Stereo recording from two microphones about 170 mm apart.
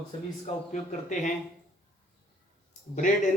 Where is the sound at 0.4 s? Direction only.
45° left (ahead or behind).